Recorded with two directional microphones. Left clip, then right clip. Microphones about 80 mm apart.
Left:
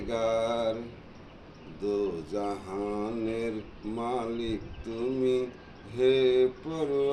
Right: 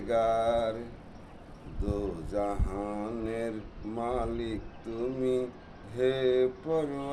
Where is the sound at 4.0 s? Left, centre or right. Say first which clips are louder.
Even; right.